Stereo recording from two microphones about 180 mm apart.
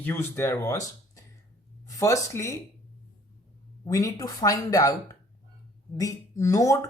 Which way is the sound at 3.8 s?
20° left (ahead or behind).